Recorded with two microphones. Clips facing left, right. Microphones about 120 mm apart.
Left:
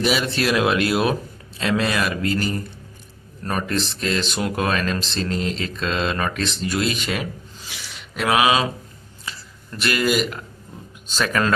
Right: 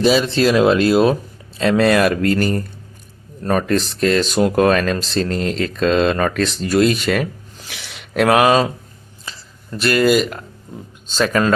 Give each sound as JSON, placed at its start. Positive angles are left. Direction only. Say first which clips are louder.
{"t": 0.0, "sound": "speech", "louder": "right 7 dB", "side_deg": -30}
{"t": 1.9, "sound": "speech", "louder": "right 8 dB", "side_deg": -50}
{"t": 3.7, "sound": "speech", "louder": "right 7 dB", "side_deg": -45}
{"t": 7.7, "sound": "a sound", "louder": "right 9 dB", "side_deg": -75}
{"t": 8.3, "sound": "speech", "louder": "right 5 dB", "side_deg": -45}
{"t": 9.9, "sound": "speech", "louder": "right 6 dB", "side_deg": -40}